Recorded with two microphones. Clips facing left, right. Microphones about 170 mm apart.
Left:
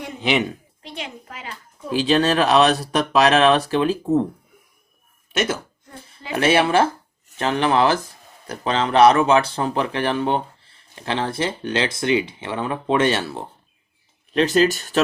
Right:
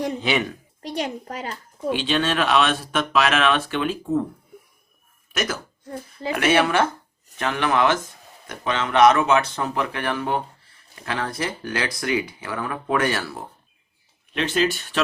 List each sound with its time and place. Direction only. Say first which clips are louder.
0.2 s speech: left 2 dB; 20° left (ahead or behind)
0.8 s a child's voice: right 11 dB; 40° right (ahead or behind)
2.0 s speech: left 7 dB; 40° left (ahead or behind)
5.3 s speech: left 4 dB; 30° left (ahead or behind)
14.3 s speech: left 5 dB; 40° left (ahead or behind)